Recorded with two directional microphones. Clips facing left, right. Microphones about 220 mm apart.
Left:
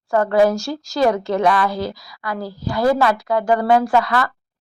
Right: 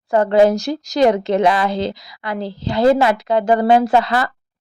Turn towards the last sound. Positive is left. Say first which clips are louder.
# right 2 dB
turn(degrees=-25)  # may be behind; listen again after turning